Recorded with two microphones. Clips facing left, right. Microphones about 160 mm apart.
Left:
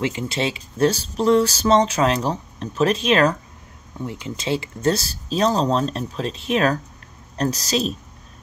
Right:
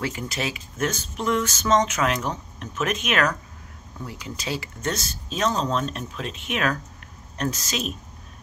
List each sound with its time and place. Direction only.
0.0 s speech: 25° left (ahead or behind)